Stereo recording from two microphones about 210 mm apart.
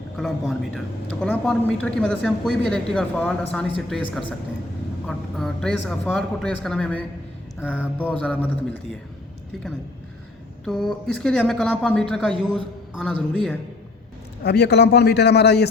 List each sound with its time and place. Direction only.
0.2 s a man's voice: centre (ahead or behind)
7.7 s mantra: 10° left (ahead or behind)
10.7 s a man's voice: centre (ahead or behind)
14.4 s a man's voice: 50° left (ahead or behind)